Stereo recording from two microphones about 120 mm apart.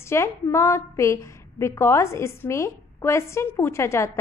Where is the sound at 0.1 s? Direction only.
20° left (ahead or behind).